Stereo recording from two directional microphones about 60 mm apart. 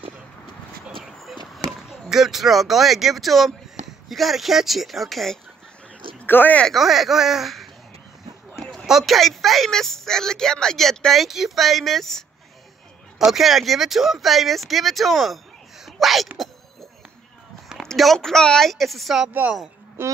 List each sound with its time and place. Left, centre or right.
1.0 s a sound: centre
1.7 s speech: centre
6.2 s speech: left
6.7 s speech: centre
8.7 s speech: centre
17.8 s speech: centre
20.0 s speech: right